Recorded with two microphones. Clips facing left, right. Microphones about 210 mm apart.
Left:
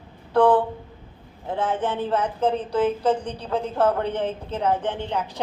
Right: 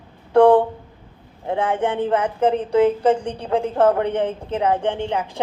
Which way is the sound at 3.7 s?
65° right (ahead or behind).